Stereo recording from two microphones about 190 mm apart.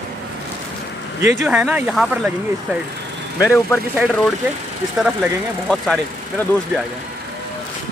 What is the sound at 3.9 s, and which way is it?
Speech, 5° right (ahead or behind).